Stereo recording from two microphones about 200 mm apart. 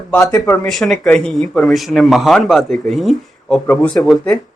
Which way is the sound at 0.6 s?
Centre (ahead or behind).